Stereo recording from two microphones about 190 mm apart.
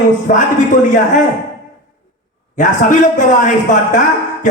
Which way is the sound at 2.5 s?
40° left (ahead or behind).